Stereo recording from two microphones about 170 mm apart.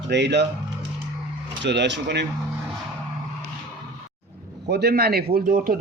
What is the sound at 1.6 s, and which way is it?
Speech, 90° right.